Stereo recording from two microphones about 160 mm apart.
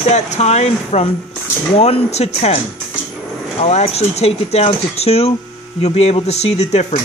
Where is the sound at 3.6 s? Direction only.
40° left (ahead or behind).